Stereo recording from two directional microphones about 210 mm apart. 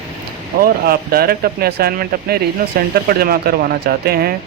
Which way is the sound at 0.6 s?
45° right (ahead or behind).